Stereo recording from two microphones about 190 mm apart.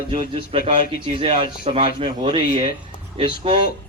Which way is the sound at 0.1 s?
25° right (ahead or behind).